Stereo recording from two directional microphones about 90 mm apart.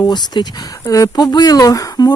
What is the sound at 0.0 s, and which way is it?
Speech, 55° left (ahead or behind).